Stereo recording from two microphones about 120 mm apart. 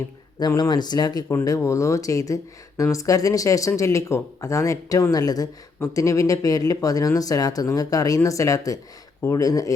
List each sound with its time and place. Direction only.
0.3 s speech: 30° left (ahead or behind)